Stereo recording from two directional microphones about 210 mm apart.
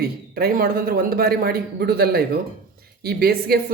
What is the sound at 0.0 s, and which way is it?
Speech, 45° right (ahead or behind).